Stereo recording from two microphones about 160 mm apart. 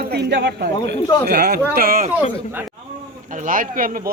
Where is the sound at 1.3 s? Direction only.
80° right.